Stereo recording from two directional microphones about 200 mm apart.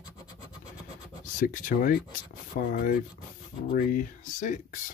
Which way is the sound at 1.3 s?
40° left (ahead or behind).